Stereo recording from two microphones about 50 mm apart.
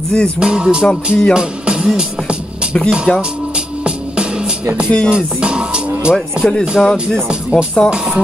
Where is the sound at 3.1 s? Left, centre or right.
Centre.